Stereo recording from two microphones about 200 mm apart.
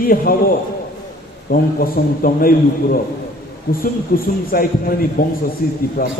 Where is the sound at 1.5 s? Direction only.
45° left (ahead or behind).